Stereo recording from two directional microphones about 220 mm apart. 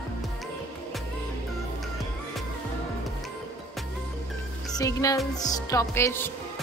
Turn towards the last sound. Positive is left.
turn(degrees=10)  # may be behind; listen again after turning